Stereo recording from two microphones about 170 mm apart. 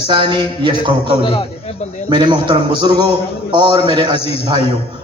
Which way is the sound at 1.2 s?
30° left (ahead or behind).